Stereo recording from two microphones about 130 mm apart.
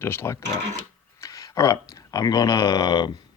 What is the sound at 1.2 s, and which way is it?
Speech, 25° left (ahead or behind).